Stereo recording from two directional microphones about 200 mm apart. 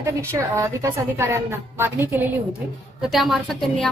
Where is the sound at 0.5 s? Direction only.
15° right (ahead or behind).